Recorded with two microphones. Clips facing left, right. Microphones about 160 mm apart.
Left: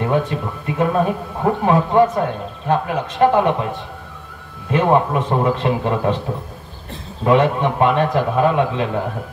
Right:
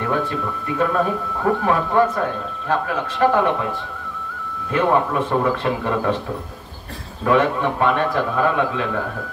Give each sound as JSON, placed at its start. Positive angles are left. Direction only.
{"t": 0.0, "sound": "speech", "side_deg": 20}
{"t": 4.6, "sound": "speech", "side_deg": 20}
{"t": 7.2, "sound": "speech", "side_deg": 20}